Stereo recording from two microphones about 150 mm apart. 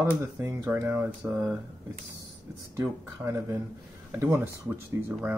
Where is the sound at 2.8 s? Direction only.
20° right (ahead or behind).